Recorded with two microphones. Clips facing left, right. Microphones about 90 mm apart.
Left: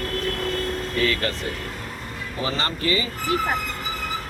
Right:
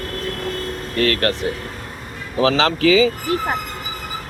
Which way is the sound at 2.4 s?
90° right.